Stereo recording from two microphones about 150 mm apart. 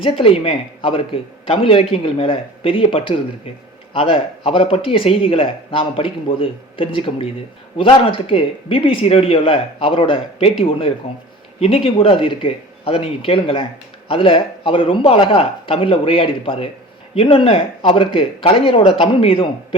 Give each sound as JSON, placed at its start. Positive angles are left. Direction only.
{"t": 0.0, "sound": "a man's voice", "side_deg": 35}